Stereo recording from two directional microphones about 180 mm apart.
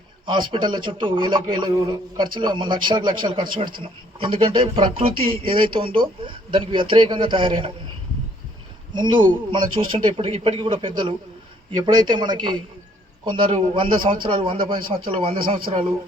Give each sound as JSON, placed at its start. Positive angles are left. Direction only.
{"t": 0.3, "sound": "speech", "side_deg": -25}
{"t": 8.9, "sound": "speech", "side_deg": -25}